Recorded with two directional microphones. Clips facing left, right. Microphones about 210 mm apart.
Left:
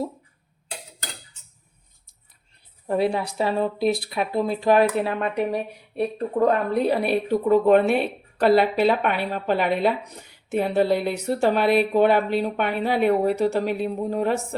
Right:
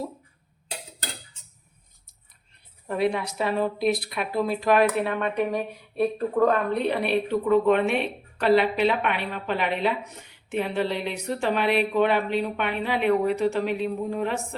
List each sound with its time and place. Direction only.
2.8 s a woman's voice: 30° left (ahead or behind)